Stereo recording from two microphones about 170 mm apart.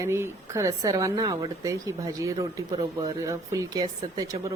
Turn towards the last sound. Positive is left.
turn(degrees=-20)  # may be behind; listen again after turning